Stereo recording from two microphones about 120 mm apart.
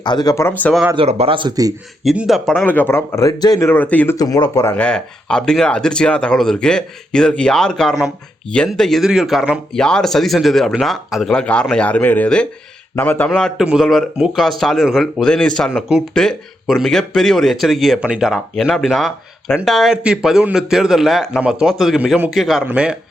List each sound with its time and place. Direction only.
0.0 s speech: 35° left (ahead or behind)
0.3 s speech: 15° left (ahead or behind)
0.9 s speech: 55° right (ahead or behind)
1.4 s a man's voice: 35° right (ahead or behind)
2.0 s speech: centre (ahead or behind)
2.5 s speech: 15° left (ahead or behind); by 3.7 s 35° left (ahead or behind)
3.7 s speech: 15° left (ahead or behind)
4.2 s speech: 30° left (ahead or behind)
4.7 s speech: 10° left (ahead or behind)
13.3 s a man's voice: 5° left (ahead or behind)